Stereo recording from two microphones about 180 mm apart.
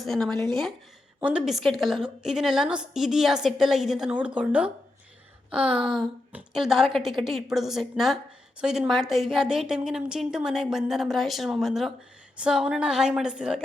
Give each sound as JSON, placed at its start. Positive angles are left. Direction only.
{"t": 0.0, "sound": "a woman's voice", "side_deg": 0}
{"t": 5.8, "sound": "a woman's voice", "side_deg": -5}